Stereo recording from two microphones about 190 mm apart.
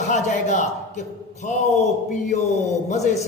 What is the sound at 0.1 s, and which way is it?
A man's voice, 40° left (ahead or behind).